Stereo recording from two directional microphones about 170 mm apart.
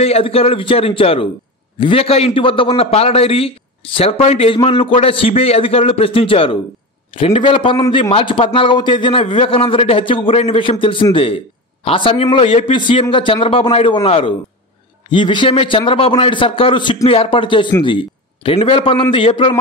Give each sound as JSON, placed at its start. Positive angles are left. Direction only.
{"t": 0.0, "sound": "a man's voice", "side_deg": 35}